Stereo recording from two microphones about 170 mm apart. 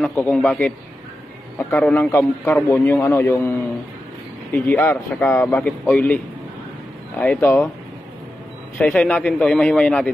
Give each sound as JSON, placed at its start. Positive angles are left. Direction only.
{"t": 0.0, "sound": "a man's voice", "side_deg": 10}
{"t": 8.7, "sound": "a man's voice", "side_deg": 10}